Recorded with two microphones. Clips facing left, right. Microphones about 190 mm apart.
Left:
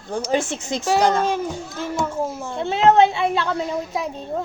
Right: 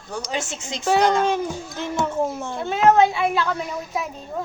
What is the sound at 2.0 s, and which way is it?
Speech, 10° left (ahead or behind).